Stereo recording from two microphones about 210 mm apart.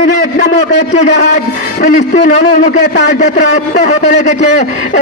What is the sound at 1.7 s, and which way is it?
A man's voice, 35° left (ahead or behind).